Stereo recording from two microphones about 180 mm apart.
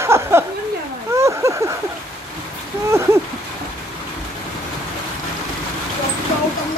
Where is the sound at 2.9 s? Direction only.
15° right (ahead or behind).